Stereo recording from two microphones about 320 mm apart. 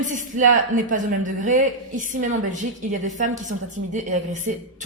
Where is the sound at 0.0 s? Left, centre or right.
Right.